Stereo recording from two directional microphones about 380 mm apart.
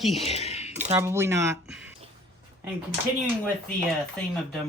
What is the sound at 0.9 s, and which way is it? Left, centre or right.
Speech, centre.